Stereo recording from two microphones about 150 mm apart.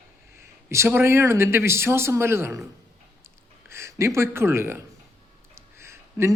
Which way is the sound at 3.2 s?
15° right (ahead or behind).